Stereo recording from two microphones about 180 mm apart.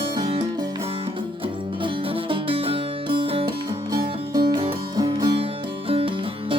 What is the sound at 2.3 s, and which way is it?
Music, 30° right (ahead or behind).